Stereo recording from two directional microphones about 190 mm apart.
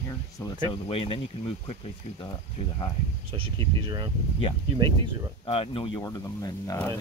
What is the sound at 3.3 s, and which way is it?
Speech, 25° right (ahead or behind).